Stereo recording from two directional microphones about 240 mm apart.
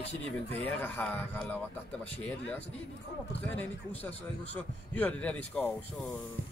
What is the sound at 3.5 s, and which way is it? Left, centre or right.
A man's voice, centre.